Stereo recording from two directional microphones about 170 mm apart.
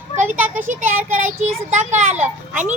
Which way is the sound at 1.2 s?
45° right (ahead or behind).